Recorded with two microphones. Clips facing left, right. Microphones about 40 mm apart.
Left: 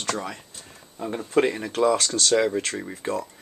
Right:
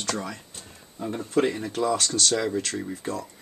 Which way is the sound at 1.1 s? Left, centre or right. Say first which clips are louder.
Left 2 dB; left.